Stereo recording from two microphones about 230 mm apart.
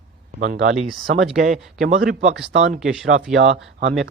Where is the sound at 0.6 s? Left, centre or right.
Right.